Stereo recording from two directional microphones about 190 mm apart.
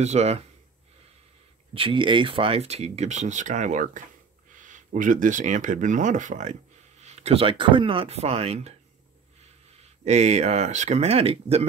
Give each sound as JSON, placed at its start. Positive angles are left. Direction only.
{"t": 0.0, "sound": "speech", "side_deg": -35}
{"t": 1.7, "sound": "speech", "side_deg": -30}
{"t": 10.0, "sound": "speech", "side_deg": -35}